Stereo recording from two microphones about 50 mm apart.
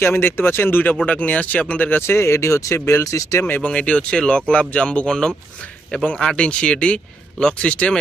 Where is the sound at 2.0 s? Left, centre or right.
Left.